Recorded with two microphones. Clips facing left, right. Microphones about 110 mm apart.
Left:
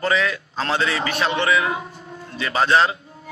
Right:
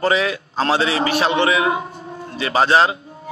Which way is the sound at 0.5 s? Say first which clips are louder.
Right 5 dB; 30° right (ahead or behind).